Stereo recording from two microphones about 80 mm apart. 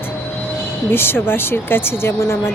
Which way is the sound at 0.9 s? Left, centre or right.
Left.